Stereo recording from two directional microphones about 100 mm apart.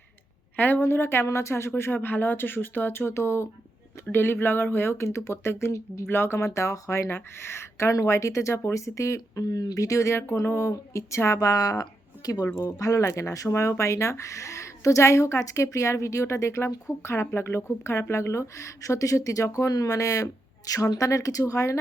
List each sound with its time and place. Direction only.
0.5 s speech: 20° left (ahead or behind)